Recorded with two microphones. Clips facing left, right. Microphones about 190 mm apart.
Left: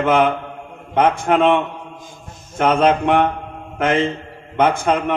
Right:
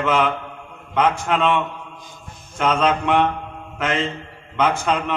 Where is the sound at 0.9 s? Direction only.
55° left (ahead or behind).